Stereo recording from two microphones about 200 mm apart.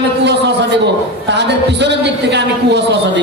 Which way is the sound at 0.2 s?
60° right (ahead or behind).